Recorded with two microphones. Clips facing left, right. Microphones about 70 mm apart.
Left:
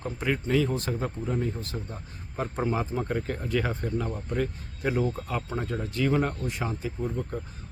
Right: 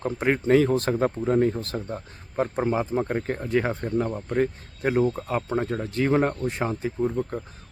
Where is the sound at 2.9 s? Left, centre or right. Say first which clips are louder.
Right 4 dB; right.